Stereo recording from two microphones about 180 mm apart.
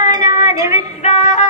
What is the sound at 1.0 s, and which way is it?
Music, 40° left (ahead or behind).